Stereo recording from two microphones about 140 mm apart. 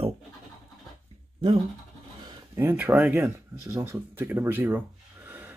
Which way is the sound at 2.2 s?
30° right (ahead or behind).